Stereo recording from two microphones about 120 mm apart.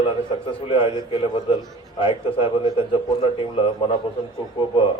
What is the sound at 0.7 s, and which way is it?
A man's voice, 45° left (ahead or behind).